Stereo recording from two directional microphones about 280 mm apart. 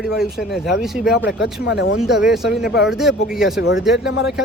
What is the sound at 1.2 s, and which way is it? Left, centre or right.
Speech, left.